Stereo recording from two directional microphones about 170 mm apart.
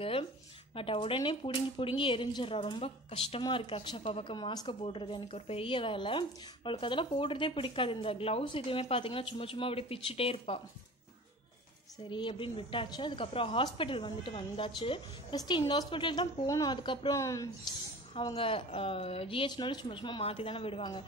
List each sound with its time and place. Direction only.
0.0 s a sound: 35° left (ahead or behind)
0.7 s speech: 30° left (ahead or behind)
12.1 s a woman's voice: 30° left (ahead or behind)
18.1 s speech: 30° left (ahead or behind)